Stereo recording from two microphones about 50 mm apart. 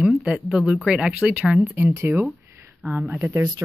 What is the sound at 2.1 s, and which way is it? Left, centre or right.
Speech, right.